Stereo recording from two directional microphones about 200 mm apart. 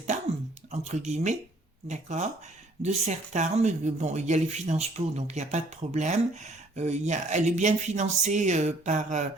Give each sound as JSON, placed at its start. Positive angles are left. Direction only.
{"t": 0.7, "sound": "speech", "side_deg": -35}